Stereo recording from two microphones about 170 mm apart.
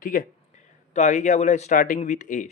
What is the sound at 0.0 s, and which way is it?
Speech, 50° left (ahead or behind).